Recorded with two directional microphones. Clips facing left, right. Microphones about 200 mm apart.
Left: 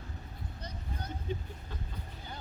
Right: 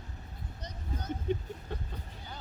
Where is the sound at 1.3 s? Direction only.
60° right (ahead or behind).